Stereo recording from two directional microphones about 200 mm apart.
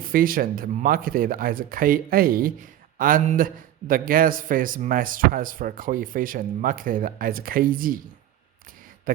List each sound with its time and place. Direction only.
0.0 s speech: 45° right (ahead or behind)
9.1 s speech: 45° right (ahead or behind)